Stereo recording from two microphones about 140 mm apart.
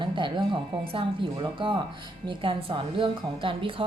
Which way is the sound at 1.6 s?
35° right (ahead or behind).